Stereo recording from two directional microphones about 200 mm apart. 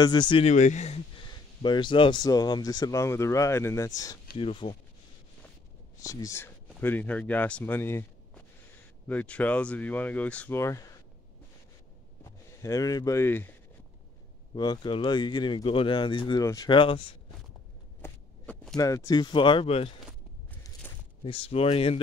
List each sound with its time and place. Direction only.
0.0 s speech: 20° left (ahead or behind)
1.6 s speech: 25° left (ahead or behind)
6.0 s speech: 15° left (ahead or behind)
12.2 s speech: 15° left (ahead or behind)
14.5 s speech: 20° left (ahead or behind)
18.0 s a sound: 5° left (ahead or behind)
18.8 s speech: 15° left (ahead or behind)
21.2 s speech: 25° left (ahead or behind)